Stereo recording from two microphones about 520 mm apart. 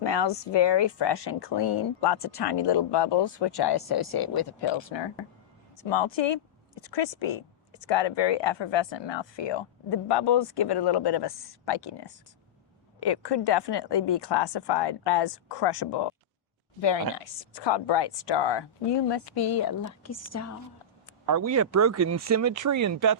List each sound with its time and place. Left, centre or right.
0.0 s speech: left
17.2 s a woman's voice: left
21.2 s speech: right